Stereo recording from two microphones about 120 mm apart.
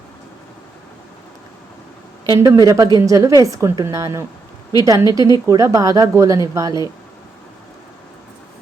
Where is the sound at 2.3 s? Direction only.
30° right (ahead or behind).